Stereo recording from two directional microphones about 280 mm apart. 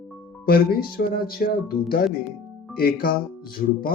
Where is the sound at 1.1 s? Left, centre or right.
Left.